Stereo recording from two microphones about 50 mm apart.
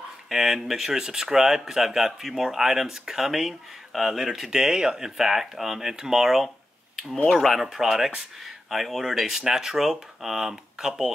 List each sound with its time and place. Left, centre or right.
0.3 s speech: centre